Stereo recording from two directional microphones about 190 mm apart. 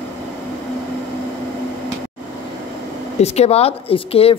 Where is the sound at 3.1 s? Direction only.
35° left (ahead or behind).